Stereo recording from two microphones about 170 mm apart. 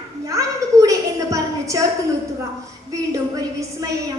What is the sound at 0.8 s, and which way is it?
Speech, 20° right (ahead or behind).